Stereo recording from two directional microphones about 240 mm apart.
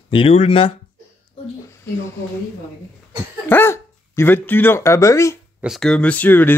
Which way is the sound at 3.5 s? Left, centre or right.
Centre.